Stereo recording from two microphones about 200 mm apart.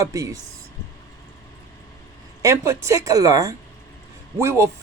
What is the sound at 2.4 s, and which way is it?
Speech, 15° right (ahead or behind).